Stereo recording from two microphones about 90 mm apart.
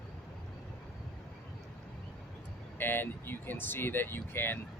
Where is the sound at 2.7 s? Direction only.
25° left (ahead or behind).